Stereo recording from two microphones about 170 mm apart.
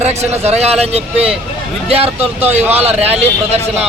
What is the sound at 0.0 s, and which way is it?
Speech, 40° right (ahead or behind).